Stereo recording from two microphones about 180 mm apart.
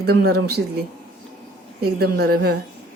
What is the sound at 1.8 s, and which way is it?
Speech, 60° right (ahead or behind).